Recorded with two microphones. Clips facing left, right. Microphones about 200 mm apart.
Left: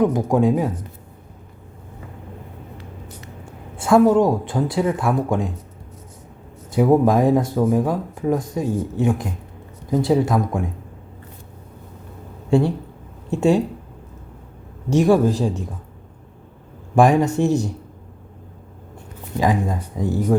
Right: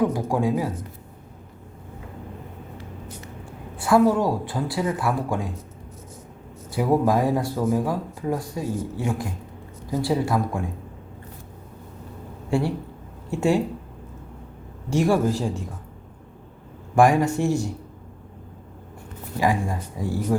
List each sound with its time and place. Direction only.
0.0 s speech: 20° left (ahead or behind)
3.8 s speech: 25° left (ahead or behind)
6.7 s speech: 25° left (ahead or behind)
12.5 s speech: 20° left (ahead or behind)
14.8 s speech: 20° left (ahead or behind)
16.9 s speech: 20° left (ahead or behind)
19.4 s speech: 20° left (ahead or behind)